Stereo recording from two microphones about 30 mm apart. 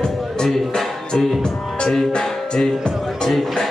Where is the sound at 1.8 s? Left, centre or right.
Centre.